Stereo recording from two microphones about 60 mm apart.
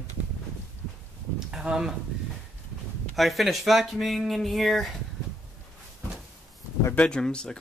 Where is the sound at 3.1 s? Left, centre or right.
Centre.